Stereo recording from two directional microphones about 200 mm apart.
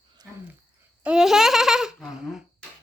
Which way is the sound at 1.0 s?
5° right (ahead or behind).